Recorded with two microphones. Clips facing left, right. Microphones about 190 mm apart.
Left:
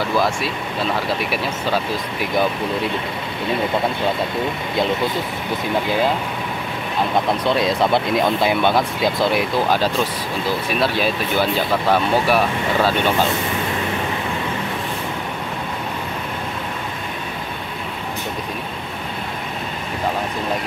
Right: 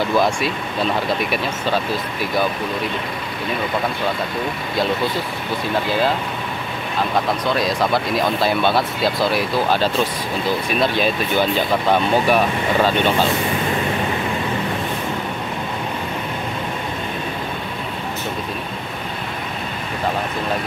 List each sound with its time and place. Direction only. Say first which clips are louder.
7.4 s speech: left 2 dB; 25° left (ahead or behind); by 13.1 s 10° left (ahead or behind)